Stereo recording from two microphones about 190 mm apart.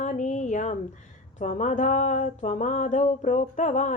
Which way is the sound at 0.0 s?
40° left (ahead or behind).